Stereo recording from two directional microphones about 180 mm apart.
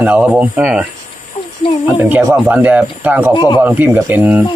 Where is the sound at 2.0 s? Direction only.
10° right (ahead or behind).